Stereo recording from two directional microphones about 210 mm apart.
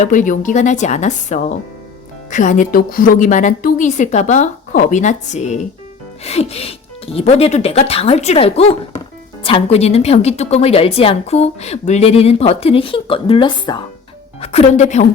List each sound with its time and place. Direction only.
0.0 s a woman's voice: 35° left (ahead or behind)